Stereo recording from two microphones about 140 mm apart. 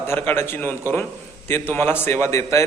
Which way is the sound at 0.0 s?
15° left (ahead or behind).